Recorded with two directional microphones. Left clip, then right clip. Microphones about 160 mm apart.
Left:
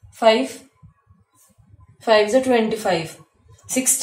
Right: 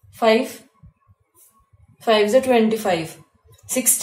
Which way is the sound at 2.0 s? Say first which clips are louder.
Even; 40° right (ahead or behind).